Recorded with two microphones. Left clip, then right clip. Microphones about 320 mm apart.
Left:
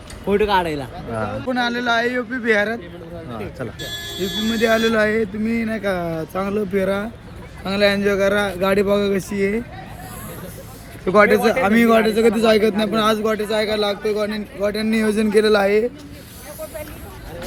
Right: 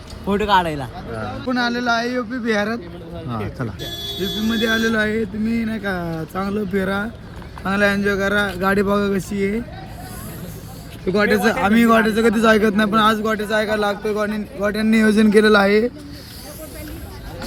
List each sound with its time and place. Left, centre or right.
0.3 s a man's voice: centre
4.0 s speech: left
4.9 s a man's voice: centre
11.0 s a man's voice: centre; by 15.9 s right